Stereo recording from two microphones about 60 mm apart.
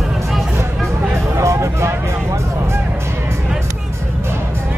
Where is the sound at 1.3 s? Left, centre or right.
Right.